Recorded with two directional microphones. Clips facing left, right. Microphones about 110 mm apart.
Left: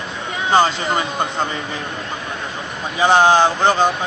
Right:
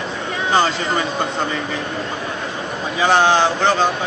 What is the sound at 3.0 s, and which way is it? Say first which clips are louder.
Speech: left 2 dB; 15° left (ahead or behind).